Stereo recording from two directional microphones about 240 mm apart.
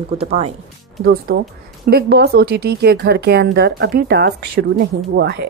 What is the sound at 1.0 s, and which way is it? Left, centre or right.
A woman's voice, right.